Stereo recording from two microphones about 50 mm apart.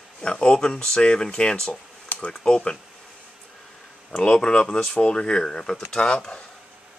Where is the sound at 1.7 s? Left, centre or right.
Left.